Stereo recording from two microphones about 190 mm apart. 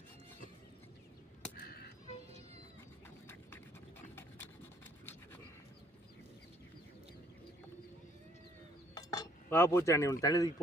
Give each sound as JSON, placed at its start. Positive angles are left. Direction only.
{"t": 1.5, "sound": "a sound", "side_deg": 55}
{"t": 4.1, "sound": "pant", "side_deg": 10}
{"t": 9.0, "sound": "speech", "side_deg": 20}